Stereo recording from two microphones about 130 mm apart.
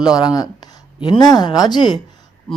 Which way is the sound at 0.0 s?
30° left (ahead or behind).